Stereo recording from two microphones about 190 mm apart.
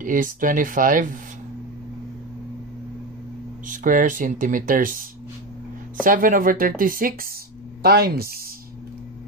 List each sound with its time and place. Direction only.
0.0 s speech: 45° right (ahead or behind)
3.6 s speech: 45° right (ahead or behind)
6.0 s speech: 45° right (ahead or behind)